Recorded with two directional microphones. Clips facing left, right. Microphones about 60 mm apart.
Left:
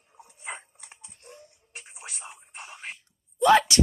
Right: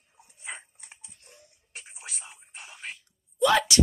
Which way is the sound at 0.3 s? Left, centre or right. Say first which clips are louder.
Left 3 dB; left.